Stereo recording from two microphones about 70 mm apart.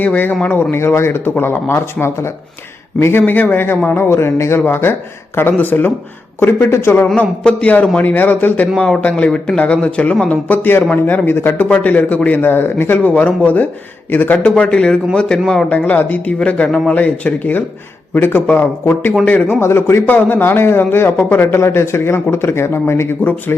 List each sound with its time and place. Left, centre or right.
0.0 s speech: left
7.2 s speech: centre
10.5 s speech: left
13.0 s speech: left
14.3 s speech: centre
15.8 s speech: left
16.9 s speech: left
19.5 s speech: left
20.1 s speech: left